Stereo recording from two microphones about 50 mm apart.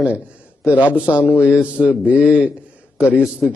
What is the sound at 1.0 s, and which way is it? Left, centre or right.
A man's voice, right.